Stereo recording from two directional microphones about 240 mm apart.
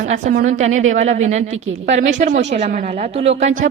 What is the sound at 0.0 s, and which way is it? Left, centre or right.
A woman's voice, right.